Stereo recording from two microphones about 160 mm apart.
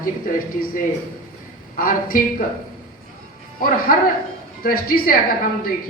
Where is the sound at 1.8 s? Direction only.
60° left (ahead or behind).